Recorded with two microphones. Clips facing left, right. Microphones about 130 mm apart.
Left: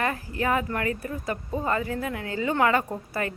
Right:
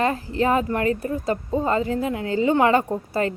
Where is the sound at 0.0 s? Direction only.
25° right (ahead or behind).